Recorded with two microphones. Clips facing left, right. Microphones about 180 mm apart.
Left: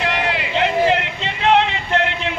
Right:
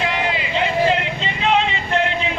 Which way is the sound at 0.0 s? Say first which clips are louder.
Left 1 dB; 70° left (ahead or behind).